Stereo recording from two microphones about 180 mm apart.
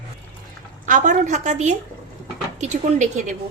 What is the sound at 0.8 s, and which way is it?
A woman's voice, 45° right (ahead or behind).